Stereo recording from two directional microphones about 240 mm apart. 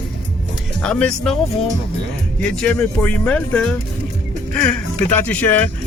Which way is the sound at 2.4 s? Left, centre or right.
Centre.